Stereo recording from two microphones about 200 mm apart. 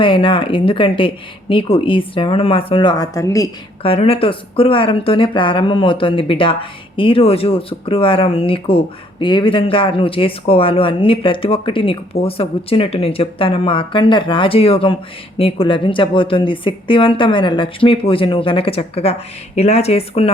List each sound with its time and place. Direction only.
0.0 s speech: 25° left (ahead or behind)
3.8 s speech: 30° left (ahead or behind)